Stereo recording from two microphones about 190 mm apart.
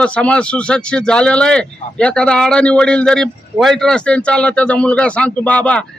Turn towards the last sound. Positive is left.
turn(degrees=5)  # may be behind; listen again after turning